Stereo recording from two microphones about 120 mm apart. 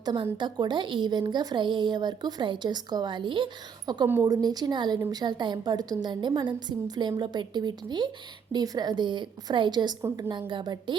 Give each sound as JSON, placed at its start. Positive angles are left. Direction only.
{"t": 0.0, "sound": "a woman's voice", "side_deg": -40}